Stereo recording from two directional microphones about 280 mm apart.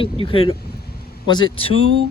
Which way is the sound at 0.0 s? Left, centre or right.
Centre.